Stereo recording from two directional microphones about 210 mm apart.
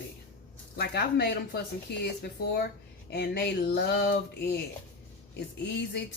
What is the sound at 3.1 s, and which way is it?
A woman's voice, 50° left (ahead or behind).